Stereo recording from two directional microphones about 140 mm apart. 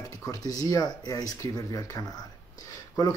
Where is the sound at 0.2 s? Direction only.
25° left (ahead or behind).